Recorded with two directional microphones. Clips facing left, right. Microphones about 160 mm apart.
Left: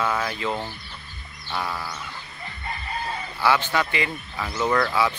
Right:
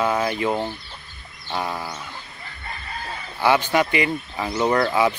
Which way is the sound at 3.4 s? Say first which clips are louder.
Right 4 dB; 15° right (ahead or behind).